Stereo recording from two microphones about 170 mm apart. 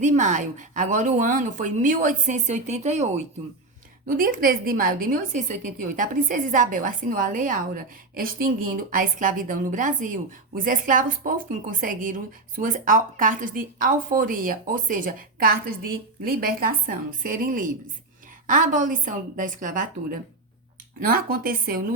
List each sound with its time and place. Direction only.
0.0 s a woman's voice: 45° right (ahead or behind)
4.0 s a woman's voice: 55° right (ahead or behind)